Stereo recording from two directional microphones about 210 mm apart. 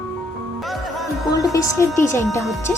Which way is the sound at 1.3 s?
15° left (ahead or behind).